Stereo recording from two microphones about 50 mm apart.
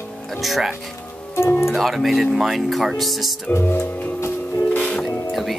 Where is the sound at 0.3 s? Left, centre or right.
Centre.